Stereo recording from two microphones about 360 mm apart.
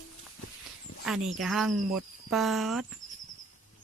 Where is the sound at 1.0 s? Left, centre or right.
Centre.